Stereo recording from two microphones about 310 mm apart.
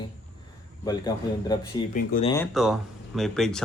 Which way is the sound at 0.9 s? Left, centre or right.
Centre.